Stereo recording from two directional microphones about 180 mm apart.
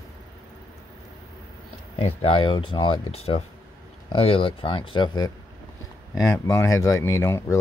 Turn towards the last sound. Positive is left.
turn(degrees=20)  # may be behind; listen again after turning